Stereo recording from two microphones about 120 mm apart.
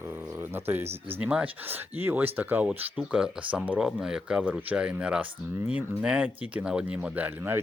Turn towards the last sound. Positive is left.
turn(degrees=-15)  # may be behind; listen again after turning